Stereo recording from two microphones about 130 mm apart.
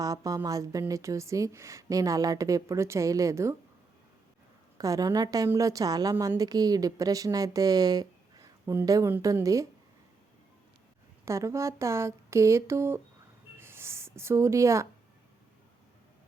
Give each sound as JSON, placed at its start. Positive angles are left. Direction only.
{"t": 0.0, "sound": "a woman's voice", "side_deg": -25}
{"t": 4.8, "sound": "a woman's voice", "side_deg": -25}
{"t": 11.3, "sound": "a woman's voice", "side_deg": -20}
{"t": 13.6, "sound": "music", "side_deg": -20}